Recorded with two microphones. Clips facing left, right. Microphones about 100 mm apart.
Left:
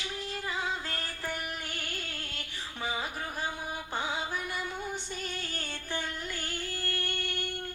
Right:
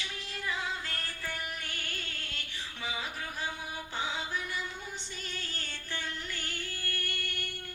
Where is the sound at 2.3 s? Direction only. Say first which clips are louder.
Left 2 dB; 40° left (ahead or behind).